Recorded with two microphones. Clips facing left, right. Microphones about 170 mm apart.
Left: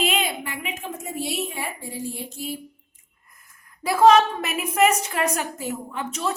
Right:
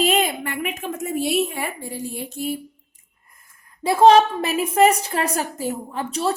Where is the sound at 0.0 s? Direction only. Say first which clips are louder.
Right 5 dB; 45° right (ahead or behind).